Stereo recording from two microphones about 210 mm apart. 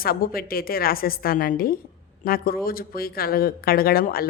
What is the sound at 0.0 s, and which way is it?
Speech, 45° left (ahead or behind).